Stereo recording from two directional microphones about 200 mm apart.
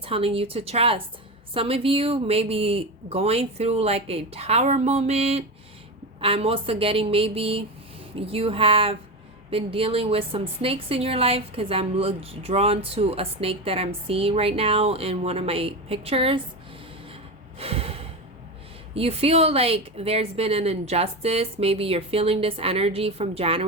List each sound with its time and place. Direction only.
0.0 s speech: 30° right (ahead or behind)
17.6 s snort: 30° right (ahead or behind)
18.9 s speech: 30° right (ahead or behind)